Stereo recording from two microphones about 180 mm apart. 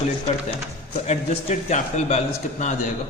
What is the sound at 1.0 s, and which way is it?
A man's voice, 40° left (ahead or behind).